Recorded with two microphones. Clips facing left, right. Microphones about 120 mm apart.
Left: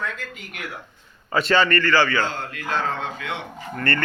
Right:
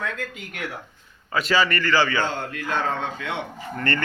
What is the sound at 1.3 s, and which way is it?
Speech, centre (ahead or behind).